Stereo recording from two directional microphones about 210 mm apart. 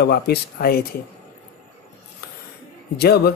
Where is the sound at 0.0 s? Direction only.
50° left (ahead or behind).